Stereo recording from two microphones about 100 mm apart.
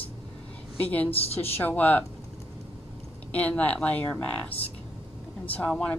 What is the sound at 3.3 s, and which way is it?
A woman's voice, 15° left (ahead or behind).